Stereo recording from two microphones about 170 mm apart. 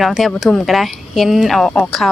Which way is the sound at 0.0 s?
Centre (ahead or behind).